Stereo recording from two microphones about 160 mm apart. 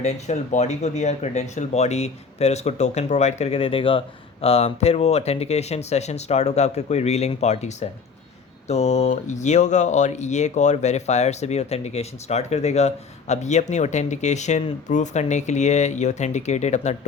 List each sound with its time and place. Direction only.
0.0 s speech: 45° left (ahead or behind)